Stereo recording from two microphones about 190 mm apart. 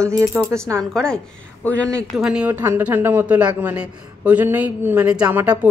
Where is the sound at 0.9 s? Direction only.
5° left (ahead or behind).